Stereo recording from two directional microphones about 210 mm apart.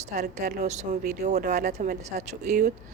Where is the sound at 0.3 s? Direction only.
35° right (ahead or behind).